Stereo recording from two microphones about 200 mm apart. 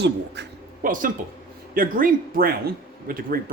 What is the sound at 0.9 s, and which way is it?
A man's voice, 40° right (ahead or behind).